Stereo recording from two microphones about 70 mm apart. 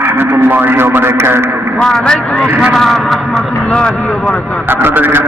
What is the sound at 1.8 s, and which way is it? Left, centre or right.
A man's voice, centre.